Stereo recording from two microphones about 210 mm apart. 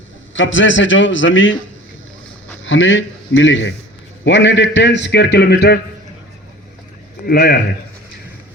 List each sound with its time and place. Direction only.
0.3 s a man's voice: 65° left (ahead or behind)
2.6 s a man's voice: 65° left (ahead or behind)
7.3 s speech: 45° left (ahead or behind)